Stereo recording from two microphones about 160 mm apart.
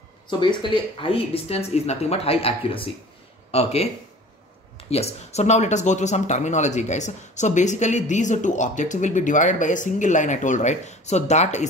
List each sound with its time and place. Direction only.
0.3 s speech: 30° left (ahead or behind); by 11.6 s 45° left (ahead or behind)